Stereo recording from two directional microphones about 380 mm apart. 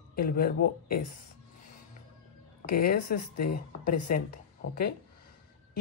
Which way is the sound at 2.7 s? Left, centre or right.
Left.